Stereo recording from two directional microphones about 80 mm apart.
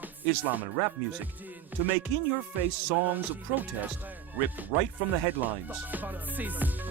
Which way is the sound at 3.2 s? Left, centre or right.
Right.